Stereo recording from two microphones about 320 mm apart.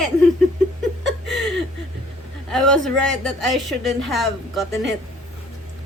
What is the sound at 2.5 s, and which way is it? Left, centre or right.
Speech, centre.